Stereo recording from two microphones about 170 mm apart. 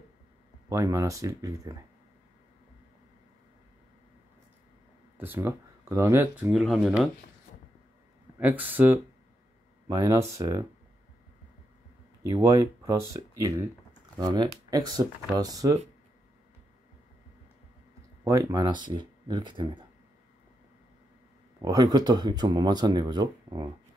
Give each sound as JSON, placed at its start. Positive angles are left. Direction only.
{"t": 0.7, "sound": "speech", "side_deg": -20}
{"t": 5.1, "sound": "speech", "side_deg": -10}
{"t": 6.5, "sound": "speech", "side_deg": 0}
{"t": 8.4, "sound": "speech", "side_deg": -10}
{"t": 12.2, "sound": "speech", "side_deg": -20}
{"t": 18.2, "sound": "speech", "side_deg": -20}
{"t": 21.5, "sound": "speech", "side_deg": -20}